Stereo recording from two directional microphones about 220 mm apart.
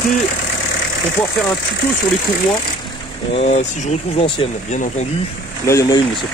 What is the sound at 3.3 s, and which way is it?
Speech, 30° left (ahead or behind).